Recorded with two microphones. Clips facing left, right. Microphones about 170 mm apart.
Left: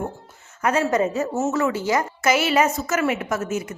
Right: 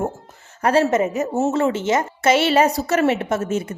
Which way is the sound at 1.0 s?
20° right (ahead or behind).